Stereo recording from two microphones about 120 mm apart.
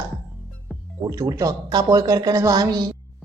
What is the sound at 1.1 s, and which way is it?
A woman's voice, 25° right (ahead or behind).